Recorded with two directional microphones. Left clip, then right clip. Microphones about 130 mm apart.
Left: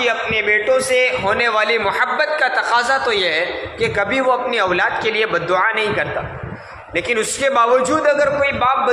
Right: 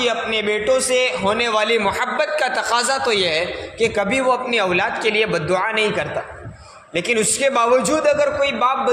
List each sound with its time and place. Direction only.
0.0 s a man's voice: 45° right (ahead or behind)